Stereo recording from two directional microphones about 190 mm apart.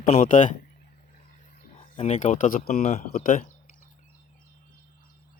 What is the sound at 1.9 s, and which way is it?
Speech, 35° left (ahead or behind).